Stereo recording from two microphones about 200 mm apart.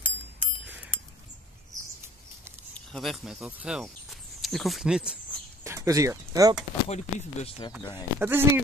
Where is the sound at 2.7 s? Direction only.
Centre (ahead or behind).